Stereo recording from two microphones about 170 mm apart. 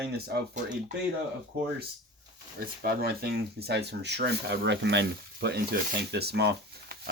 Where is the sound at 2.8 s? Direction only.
65° right (ahead or behind).